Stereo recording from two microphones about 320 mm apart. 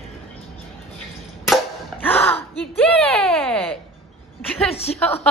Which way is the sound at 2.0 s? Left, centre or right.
Centre.